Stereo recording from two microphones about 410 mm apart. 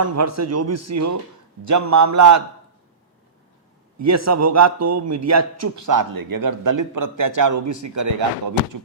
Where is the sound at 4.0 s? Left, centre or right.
Right.